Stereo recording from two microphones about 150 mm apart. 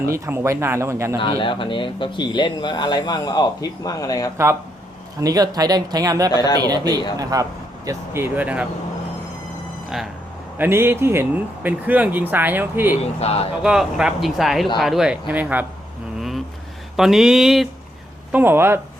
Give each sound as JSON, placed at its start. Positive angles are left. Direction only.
{"t": 0.0, "sound": "speech", "side_deg": -15}
{"t": 1.2, "sound": "speech", "side_deg": 35}
{"t": 5.2, "sound": "speech", "side_deg": -25}
{"t": 6.3, "sound": "speech", "side_deg": 25}
{"t": 6.6, "sound": "speech", "side_deg": -25}
{"t": 10.6, "sound": "speech", "side_deg": -15}
{"t": 13.1, "sound": "speech", "side_deg": 45}
{"t": 13.6, "sound": "speech", "side_deg": -5}
{"t": 17.0, "sound": "speech", "side_deg": 0}
{"t": 18.3, "sound": "speech", "side_deg": -10}